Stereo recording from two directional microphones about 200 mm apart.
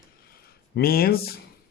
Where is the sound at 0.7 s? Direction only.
50° left (ahead or behind).